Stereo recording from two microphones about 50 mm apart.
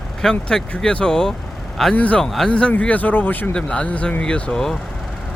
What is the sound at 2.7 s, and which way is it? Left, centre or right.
Speech, left.